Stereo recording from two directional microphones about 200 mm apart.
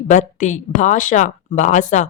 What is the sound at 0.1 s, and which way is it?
Speech, 40° left (ahead or behind).